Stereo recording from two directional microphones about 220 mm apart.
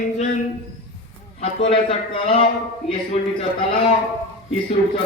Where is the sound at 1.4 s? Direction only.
25° left (ahead or behind).